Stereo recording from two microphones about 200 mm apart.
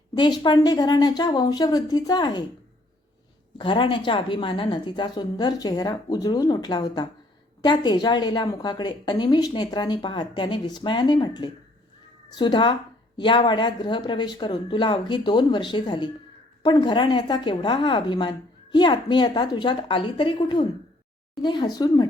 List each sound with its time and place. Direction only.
0.1 s a woman's voice: 20° left (ahead or behind)
3.6 s a woman's voice: 25° left (ahead or behind)